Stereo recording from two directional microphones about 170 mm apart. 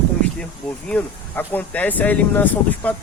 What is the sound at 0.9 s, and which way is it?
Speech, 10° left (ahead or behind).